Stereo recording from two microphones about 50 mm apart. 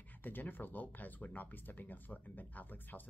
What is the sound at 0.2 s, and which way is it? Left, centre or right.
A woman's voice, left.